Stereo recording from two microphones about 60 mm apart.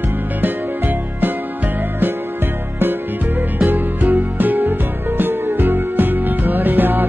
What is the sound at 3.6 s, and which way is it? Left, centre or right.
Music, right.